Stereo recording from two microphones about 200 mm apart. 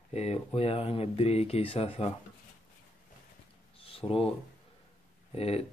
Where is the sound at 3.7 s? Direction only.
30° left (ahead or behind).